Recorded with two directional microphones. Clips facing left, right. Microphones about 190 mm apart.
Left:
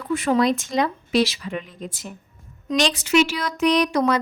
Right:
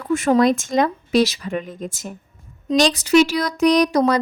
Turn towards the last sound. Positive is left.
turn(degrees=-35)  # may be behind; listen again after turning